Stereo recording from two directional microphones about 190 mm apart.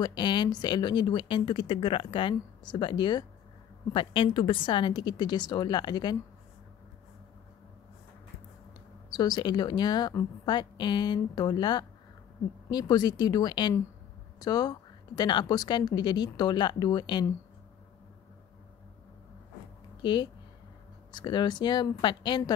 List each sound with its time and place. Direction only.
0.0 s speech: 25° left (ahead or behind)
9.1 s speech: 20° left (ahead or behind)
20.0 s speech: 25° left (ahead or behind)